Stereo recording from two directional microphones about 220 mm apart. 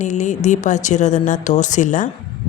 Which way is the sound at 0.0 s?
35° left (ahead or behind).